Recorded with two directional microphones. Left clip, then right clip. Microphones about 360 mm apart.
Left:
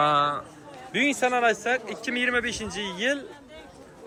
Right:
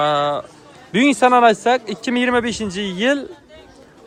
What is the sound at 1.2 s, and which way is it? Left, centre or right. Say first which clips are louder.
Speech: right 13 dB; right.